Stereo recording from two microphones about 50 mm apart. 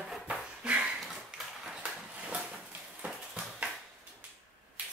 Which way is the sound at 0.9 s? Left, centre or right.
Centre.